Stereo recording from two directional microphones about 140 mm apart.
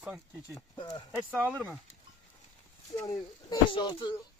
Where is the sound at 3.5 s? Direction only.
35° left (ahead or behind).